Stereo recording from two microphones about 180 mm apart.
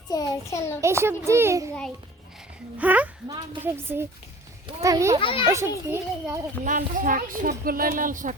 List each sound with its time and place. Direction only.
0.1 s a child's voice: 20° left (ahead or behind)
0.8 s a child's voice: 15° right (ahead or behind)
2.7 s a child's voice: 10° right (ahead or behind)
5.2 s a child's voice: 30° left (ahead or behind)
5.5 s a child's voice: 15° right (ahead or behind)
6.7 s a child's voice: 45° right (ahead or behind)